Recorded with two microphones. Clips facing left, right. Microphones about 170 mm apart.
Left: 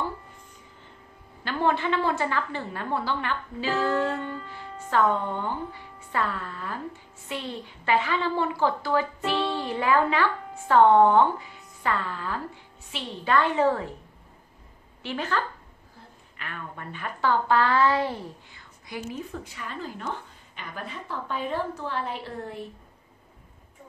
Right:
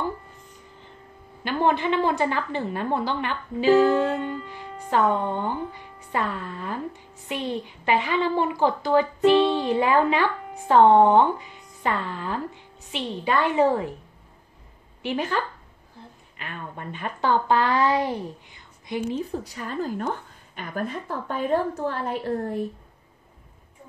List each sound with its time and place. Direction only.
1.4 s a woman's voice: 15° right (ahead or behind)
15.0 s a woman's voice: 15° right (ahead or behind)
19.0 s a woman's voice: 35° right (ahead or behind)